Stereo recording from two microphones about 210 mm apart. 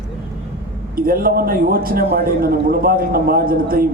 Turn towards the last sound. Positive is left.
turn(degrees=-45)  # may be behind; listen again after turning